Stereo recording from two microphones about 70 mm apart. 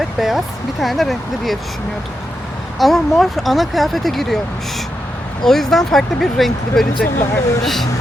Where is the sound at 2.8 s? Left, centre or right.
Centre.